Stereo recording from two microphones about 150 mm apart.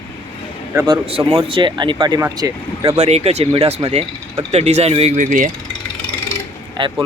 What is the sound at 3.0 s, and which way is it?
Speech, 45° right (ahead or behind).